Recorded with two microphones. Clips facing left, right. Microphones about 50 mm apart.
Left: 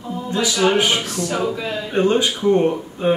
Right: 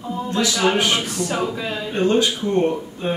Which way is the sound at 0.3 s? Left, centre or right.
Centre.